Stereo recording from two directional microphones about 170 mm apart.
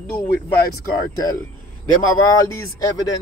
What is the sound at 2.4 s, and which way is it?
Speech, 20° left (ahead or behind).